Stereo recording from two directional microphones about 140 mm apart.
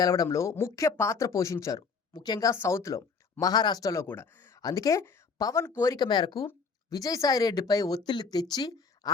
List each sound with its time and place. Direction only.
0.0 s speech: 25° left (ahead or behind)
4.0 s speech: 15° left (ahead or behind)